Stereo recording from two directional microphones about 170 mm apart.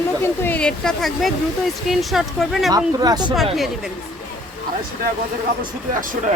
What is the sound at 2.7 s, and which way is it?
Speech, 25° right (ahead or behind).